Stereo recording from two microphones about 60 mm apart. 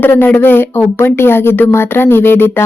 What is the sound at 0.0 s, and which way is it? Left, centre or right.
Speech, left.